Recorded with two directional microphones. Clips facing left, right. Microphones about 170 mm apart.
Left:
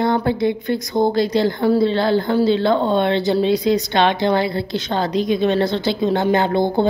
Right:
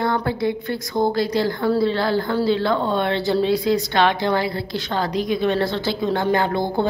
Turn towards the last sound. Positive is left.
turn(degrees=20)  # may be behind; listen again after turning